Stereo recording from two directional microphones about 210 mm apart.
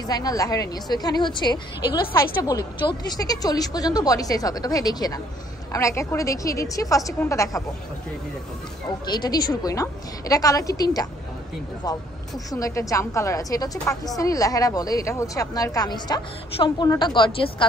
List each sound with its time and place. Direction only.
0.0 s a woman's voice: 20° left (ahead or behind)
9.0 s a woman's voice: 20° left (ahead or behind)
12.4 s a woman's voice: 15° left (ahead or behind)